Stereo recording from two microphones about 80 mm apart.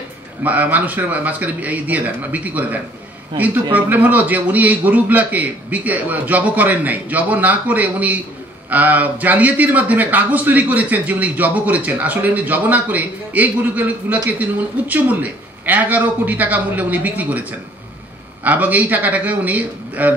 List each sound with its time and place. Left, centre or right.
0.4 s a man's voice: right